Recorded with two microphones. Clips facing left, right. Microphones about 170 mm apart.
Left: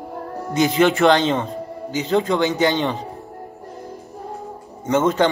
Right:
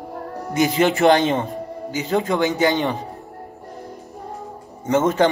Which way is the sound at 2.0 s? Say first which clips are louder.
Left 2 dB; 45° right (ahead or behind).